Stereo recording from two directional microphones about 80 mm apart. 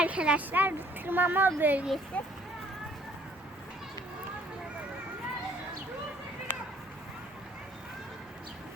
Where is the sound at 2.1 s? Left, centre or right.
Centre.